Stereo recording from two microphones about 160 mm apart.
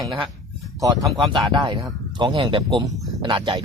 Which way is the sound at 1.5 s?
25° right (ahead or behind).